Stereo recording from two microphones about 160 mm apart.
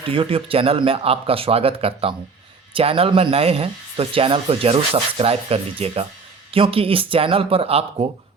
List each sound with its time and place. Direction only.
0.0 s speech: 35° right (ahead or behind)